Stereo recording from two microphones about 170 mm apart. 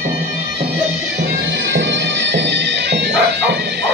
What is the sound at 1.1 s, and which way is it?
Music, 90° right.